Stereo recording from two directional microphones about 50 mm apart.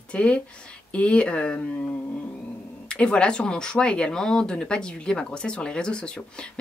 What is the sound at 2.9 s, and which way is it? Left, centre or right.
Speech, left.